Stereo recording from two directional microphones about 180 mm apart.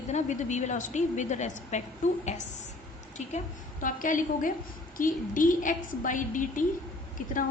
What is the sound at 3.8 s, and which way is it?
A woman's voice, 45° left (ahead or behind).